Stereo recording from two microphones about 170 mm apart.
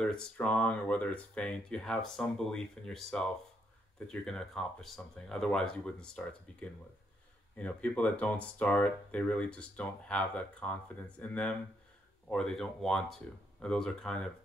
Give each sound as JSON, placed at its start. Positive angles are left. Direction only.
{"t": 0.0, "sound": "speech", "side_deg": 5}
{"t": 7.5, "sound": "speech", "side_deg": 10}